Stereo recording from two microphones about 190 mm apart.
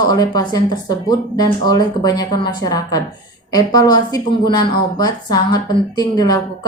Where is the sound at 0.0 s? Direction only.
20° left (ahead or behind).